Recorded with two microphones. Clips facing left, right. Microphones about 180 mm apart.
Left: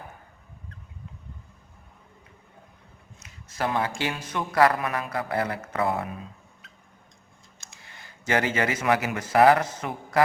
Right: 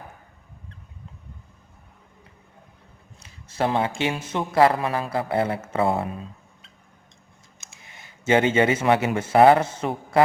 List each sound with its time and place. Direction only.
3.2 s speech: 30° right (ahead or behind)
7.8 s speech: 20° right (ahead or behind)